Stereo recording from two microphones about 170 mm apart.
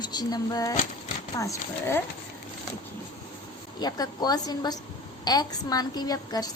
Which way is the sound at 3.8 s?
25° left (ahead or behind).